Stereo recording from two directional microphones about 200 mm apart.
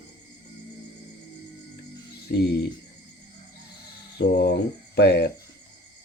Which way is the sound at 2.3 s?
55° left (ahead or behind).